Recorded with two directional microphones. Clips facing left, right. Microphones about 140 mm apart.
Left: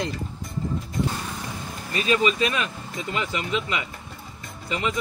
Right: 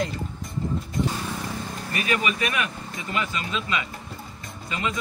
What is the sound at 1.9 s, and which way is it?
Speech, 25° left (ahead or behind).